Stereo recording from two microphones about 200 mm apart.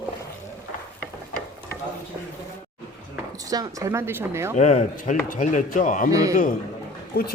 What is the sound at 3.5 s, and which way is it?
Speech, 20° right (ahead or behind).